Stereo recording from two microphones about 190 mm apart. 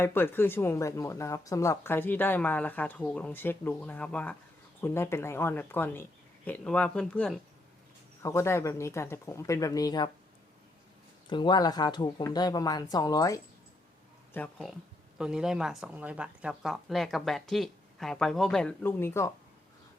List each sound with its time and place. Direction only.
0.0 s speech: 10° left (ahead or behind)
8.2 s speech: 15° left (ahead or behind)
11.3 s speech: 25° left (ahead or behind)
14.3 s speech: 5° left (ahead or behind)